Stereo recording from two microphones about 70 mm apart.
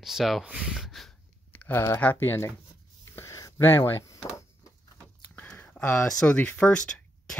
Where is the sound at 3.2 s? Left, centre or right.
Left.